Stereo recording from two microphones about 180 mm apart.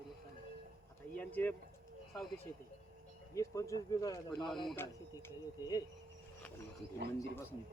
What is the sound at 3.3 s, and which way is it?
Speech, 15° left (ahead or behind).